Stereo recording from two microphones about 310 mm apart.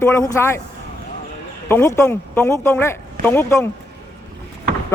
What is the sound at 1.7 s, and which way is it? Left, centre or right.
A man's voice, centre.